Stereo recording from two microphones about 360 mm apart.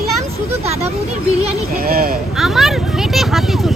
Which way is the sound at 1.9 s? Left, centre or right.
Right.